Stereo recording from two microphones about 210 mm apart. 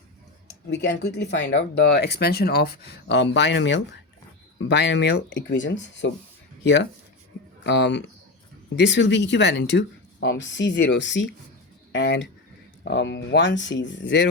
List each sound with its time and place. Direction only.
0.7 s speech: 55° left (ahead or behind)
7.6 s speech: 55° left (ahead or behind)